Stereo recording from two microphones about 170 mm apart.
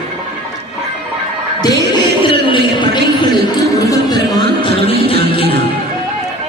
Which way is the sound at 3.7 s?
20° left (ahead or behind).